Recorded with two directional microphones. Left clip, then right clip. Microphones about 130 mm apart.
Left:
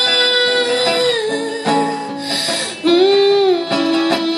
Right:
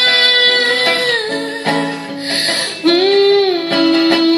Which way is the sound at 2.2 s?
35° left (ahead or behind).